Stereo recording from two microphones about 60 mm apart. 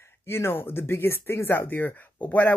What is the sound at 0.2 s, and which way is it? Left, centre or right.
Speech, left.